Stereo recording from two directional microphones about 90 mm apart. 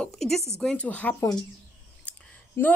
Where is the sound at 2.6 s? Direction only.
30° left (ahead or behind).